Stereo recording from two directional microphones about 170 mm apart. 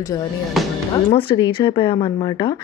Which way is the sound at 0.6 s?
Centre (ahead or behind).